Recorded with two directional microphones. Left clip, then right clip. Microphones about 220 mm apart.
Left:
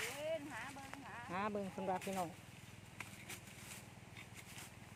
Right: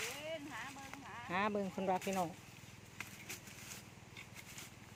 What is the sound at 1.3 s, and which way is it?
Speech, 30° right (ahead or behind).